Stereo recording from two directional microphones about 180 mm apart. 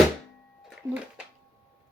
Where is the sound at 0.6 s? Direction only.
5° right (ahead or behind).